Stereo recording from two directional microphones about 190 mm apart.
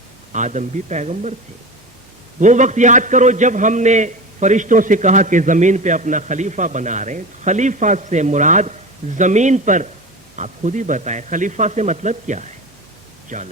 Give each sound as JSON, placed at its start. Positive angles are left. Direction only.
{"t": 0.3, "sound": "a man's voice", "side_deg": -40}
{"t": 2.4, "sound": "a man's voice", "side_deg": -40}